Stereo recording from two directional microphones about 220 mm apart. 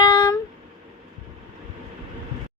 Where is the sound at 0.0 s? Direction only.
20° left (ahead or behind).